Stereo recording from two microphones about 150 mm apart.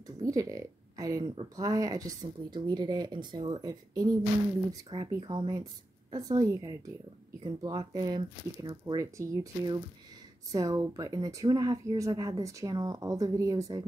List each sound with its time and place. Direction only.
0.2 s speech: 25° right (ahead or behind)